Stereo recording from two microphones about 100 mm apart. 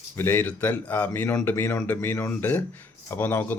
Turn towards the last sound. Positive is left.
turn(degrees=20)  # may be behind; listen again after turning